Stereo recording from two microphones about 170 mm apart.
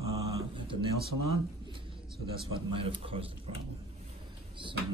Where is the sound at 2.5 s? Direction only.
30° right (ahead or behind).